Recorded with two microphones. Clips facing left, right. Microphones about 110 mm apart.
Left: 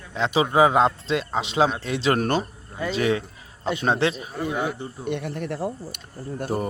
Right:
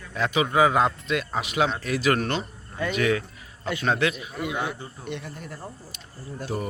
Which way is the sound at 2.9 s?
30° left (ahead or behind).